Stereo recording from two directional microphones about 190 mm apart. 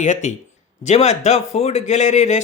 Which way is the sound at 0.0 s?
40° left (ahead or behind).